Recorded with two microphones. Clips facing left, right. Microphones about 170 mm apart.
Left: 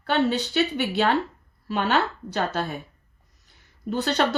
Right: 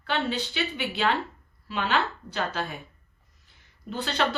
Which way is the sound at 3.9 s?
40° left (ahead or behind).